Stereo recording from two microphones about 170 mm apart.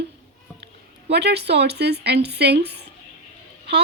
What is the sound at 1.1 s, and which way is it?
Speech, 80° right.